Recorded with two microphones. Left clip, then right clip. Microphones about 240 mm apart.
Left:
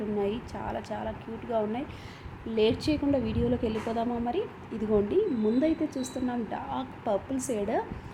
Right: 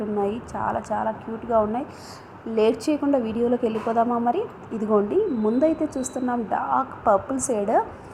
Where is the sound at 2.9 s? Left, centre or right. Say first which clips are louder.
Right 6 dB; right.